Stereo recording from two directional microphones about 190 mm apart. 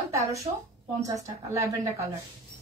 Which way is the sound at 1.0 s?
15° right (ahead or behind).